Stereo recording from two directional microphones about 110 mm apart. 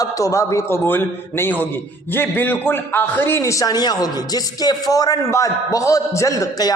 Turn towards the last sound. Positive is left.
turn(degrees=35)  # may be behind; listen again after turning